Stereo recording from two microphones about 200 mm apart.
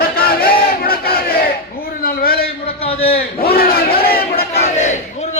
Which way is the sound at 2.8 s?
30° left (ahead or behind).